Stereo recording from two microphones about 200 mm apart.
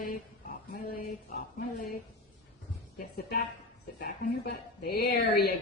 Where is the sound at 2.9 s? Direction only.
50° left (ahead or behind).